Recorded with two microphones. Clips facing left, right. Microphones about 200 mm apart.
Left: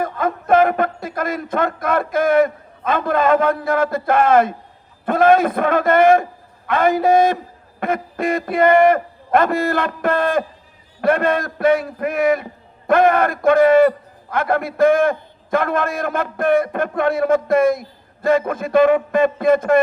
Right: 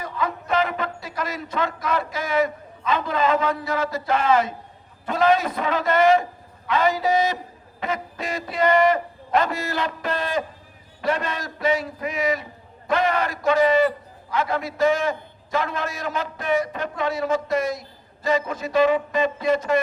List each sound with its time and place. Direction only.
0.0 s a man's voice: 55° left (ahead or behind)